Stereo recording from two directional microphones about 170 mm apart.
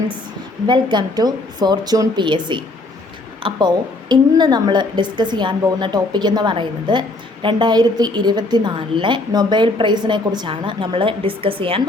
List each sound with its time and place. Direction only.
0.7 s a woman's voice: 25° right (ahead or behind)